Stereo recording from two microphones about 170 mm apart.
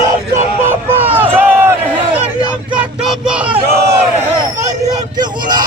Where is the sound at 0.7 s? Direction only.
10° right (ahead or behind).